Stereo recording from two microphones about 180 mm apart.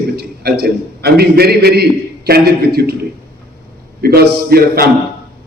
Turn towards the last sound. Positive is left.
turn(degrees=-60)  # may be behind; listen again after turning